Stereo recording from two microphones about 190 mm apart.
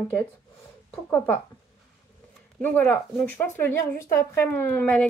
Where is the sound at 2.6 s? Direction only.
10° left (ahead or behind).